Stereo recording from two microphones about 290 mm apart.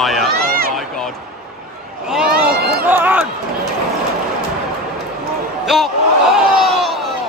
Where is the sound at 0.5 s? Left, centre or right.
Right.